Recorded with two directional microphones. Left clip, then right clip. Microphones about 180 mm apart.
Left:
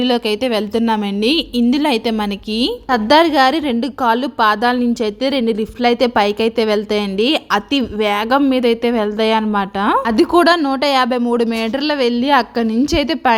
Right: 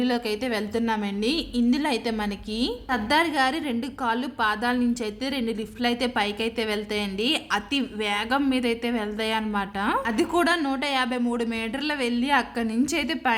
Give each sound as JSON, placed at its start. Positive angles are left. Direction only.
{"t": 0.0, "sound": "a woman's voice", "side_deg": 35}